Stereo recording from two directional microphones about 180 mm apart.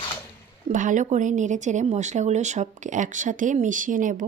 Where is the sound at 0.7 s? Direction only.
45° right (ahead or behind).